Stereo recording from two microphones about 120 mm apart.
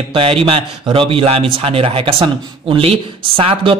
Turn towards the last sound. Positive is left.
turn(degrees=-45)  # may be behind; listen again after turning